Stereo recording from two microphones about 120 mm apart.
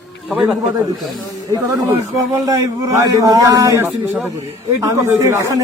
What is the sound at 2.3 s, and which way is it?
A man's voice, 30° right (ahead or behind).